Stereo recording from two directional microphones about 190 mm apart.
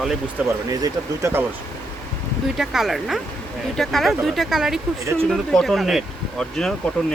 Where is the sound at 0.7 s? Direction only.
15° right (ahead or behind).